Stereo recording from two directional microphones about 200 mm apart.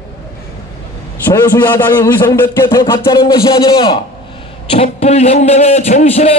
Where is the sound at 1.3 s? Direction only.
10° left (ahead or behind).